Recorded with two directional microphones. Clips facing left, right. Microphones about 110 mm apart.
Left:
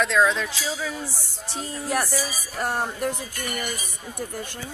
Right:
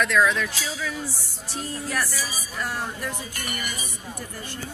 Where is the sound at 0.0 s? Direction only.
25° left (ahead or behind).